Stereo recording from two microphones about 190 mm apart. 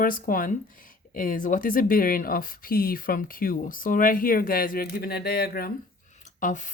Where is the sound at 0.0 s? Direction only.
45° left (ahead or behind).